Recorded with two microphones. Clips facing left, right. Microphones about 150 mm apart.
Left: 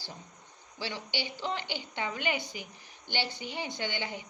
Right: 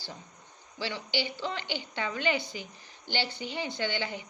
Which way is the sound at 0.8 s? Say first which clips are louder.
Right 4 dB; 15° left (ahead or behind).